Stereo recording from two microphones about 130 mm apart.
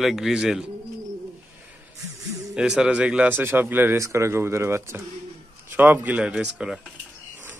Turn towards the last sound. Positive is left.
turn(degrees=-5)  # may be behind; listen again after turning